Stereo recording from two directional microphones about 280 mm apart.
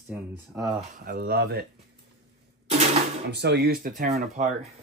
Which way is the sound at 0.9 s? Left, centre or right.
Right.